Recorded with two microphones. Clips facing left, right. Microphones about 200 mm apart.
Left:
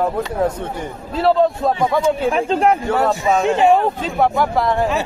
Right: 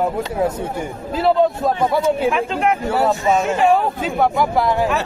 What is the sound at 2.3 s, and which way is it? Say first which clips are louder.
Speech: left 2 dB; 35° left (ahead or behind).